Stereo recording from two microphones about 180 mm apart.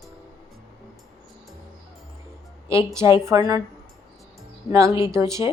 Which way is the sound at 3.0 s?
15° right (ahead or behind).